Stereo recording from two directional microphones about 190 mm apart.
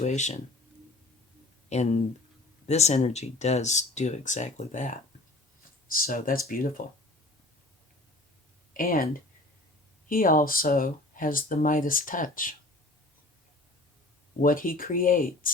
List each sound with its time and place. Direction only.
0.0 s speech: 35° left (ahead or behind)
1.7 s speech: 35° left (ahead or behind)
8.7 s speech: 45° left (ahead or behind)
10.1 s speech: 50° left (ahead or behind)
14.4 s speech: 45° left (ahead or behind)